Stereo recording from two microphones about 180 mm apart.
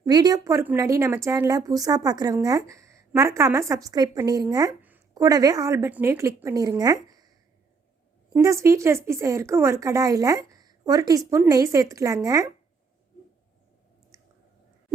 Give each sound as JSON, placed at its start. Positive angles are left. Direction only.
{"t": 0.0, "sound": "a woman's voice", "side_deg": -20}
{"t": 8.3, "sound": "speech", "side_deg": -15}
{"t": 14.1, "sound": "chewing", "side_deg": -15}